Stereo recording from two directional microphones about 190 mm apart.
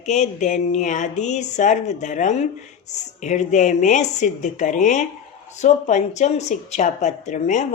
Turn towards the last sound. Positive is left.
turn(degrees=40)  # may be behind; listen again after turning